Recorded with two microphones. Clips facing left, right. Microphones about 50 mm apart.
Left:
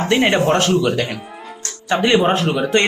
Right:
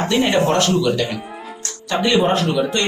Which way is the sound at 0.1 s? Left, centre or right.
Left.